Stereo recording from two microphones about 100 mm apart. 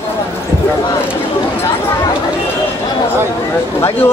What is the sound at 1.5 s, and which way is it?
Chatter, 25° left (ahead or behind).